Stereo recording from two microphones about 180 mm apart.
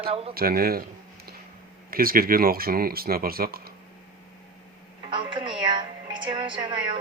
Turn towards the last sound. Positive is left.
turn(degrees=-25)  # may be behind; listen again after turning